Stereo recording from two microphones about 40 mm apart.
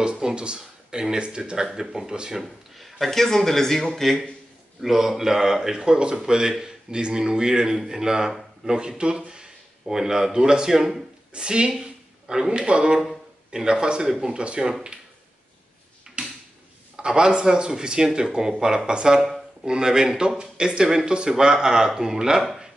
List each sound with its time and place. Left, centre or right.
0.0 s speech: centre
2.4 s speech: centre
4.8 s speech: centre; by 14.7 s right
16.9 s speech: centre